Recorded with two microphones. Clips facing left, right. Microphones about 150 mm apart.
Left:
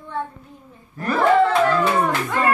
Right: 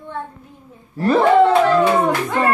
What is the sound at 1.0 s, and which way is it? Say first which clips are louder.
Speech: right 4 dB; 25° right (ahead or behind).